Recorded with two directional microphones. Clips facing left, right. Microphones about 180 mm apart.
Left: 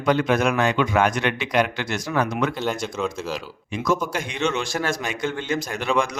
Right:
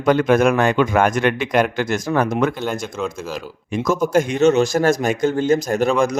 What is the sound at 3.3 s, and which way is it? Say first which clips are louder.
Speech: right 5 dB; 45° right (ahead or behind).